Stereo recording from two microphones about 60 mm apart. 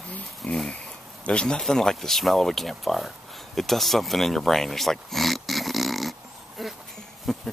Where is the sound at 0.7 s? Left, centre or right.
Centre.